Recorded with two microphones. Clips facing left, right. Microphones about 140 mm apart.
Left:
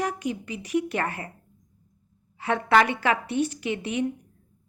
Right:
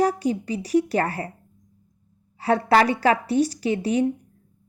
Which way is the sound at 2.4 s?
35° right (ahead or behind).